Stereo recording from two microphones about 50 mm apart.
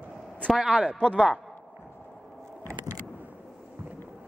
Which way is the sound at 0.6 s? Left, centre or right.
Centre.